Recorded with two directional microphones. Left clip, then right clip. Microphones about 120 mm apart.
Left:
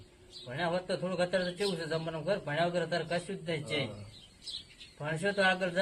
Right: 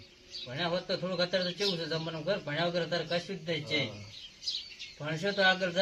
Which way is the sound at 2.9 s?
15° right (ahead or behind).